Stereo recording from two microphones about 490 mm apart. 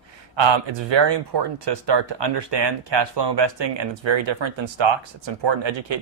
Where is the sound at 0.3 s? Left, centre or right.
Right.